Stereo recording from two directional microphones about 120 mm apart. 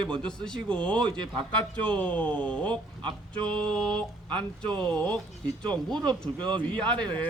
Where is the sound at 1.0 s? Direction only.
40° right (ahead or behind).